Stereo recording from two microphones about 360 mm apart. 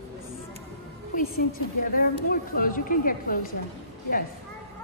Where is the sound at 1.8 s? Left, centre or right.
Left.